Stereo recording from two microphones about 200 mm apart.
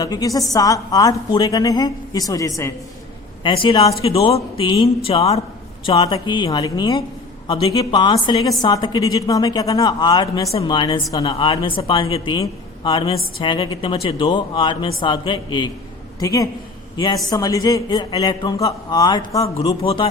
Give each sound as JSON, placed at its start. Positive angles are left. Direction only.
{"t": 0.0, "sound": "a woman's voice", "side_deg": 15}
{"t": 3.4, "sound": "a woman's voice", "side_deg": 25}
{"t": 19.5, "sound": "a woman's voice", "side_deg": 30}